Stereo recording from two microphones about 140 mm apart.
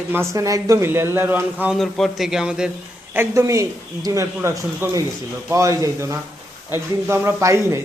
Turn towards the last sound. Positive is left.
turn(degrees=-20)  # may be behind; listen again after turning